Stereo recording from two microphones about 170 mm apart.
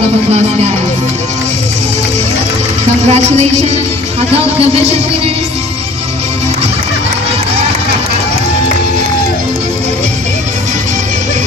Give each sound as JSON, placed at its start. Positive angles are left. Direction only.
{"t": 3.1, "sound": "speech", "side_deg": -40}